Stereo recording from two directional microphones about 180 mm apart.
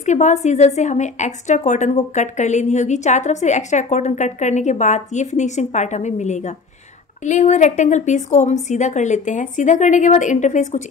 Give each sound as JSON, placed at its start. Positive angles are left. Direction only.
{"t": 0.0, "sound": "a woman's voice", "side_deg": 40}